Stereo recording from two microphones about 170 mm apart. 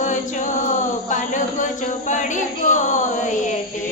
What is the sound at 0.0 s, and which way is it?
Chant, 50° left (ahead or behind).